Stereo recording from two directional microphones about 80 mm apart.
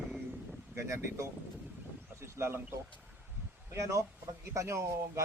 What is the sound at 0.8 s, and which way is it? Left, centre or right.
Speech, right.